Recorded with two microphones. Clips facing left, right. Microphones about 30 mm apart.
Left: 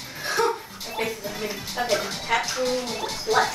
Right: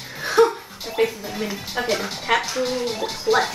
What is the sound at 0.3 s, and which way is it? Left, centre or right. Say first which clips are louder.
Music: right 7 dB; right.